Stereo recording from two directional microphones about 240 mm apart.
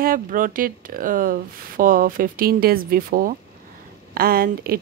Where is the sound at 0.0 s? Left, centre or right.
Right.